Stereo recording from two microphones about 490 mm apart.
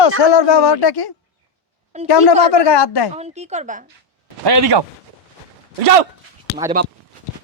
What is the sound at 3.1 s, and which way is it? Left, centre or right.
Speech, centre.